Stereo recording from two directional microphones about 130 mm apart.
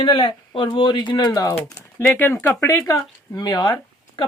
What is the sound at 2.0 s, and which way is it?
Speech, 15° left (ahead or behind).